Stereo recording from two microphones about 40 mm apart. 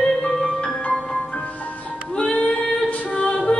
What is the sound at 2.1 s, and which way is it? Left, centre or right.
Music, left.